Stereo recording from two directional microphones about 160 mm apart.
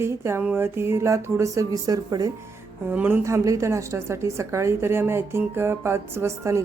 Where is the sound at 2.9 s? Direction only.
10° right (ahead or behind).